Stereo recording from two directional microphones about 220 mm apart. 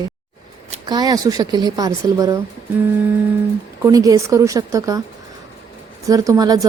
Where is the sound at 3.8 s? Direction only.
15° right (ahead or behind).